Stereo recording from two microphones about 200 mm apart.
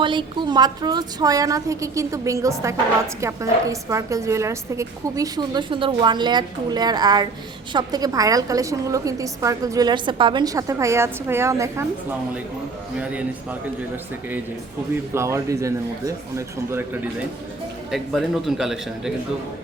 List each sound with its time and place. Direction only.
0.0 s a woman's voice: 25° right (ahead or behind)
13.0 s a woman's voice: 5° right (ahead or behind)
17.9 s a man's voice: centre (ahead or behind)